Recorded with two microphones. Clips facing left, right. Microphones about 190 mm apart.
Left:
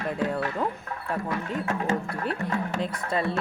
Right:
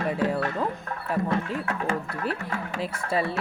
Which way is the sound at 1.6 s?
25° left (ahead or behind).